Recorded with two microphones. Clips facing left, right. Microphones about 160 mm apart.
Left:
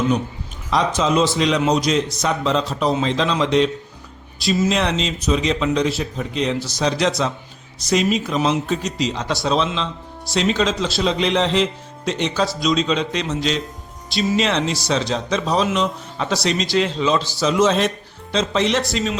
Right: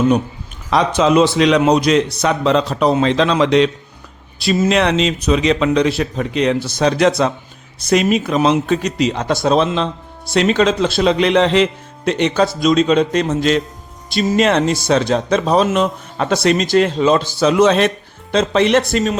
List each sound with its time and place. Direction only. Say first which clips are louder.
0.7 s speech: right 5 dB; 65° right (ahead or behind)
4.4 s speech: right 4 dB; 60° right (ahead or behind)